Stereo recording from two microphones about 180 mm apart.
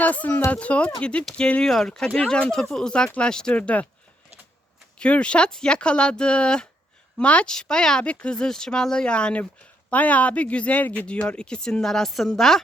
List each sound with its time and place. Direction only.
0.0 s speech: 10° left (ahead or behind)
4.9 s speech: 5° left (ahead or behind)